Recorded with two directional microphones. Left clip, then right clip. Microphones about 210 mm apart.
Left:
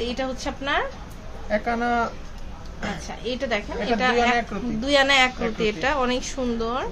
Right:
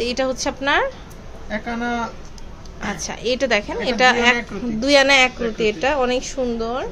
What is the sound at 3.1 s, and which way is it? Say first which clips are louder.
A woman's voice: right 8 dB; 30° right (ahead or behind).